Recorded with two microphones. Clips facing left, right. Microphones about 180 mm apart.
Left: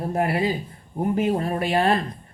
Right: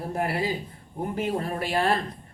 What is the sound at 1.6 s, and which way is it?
Speech, 20° left (ahead or behind).